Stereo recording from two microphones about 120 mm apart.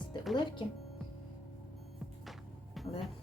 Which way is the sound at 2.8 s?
Centre (ahead or behind).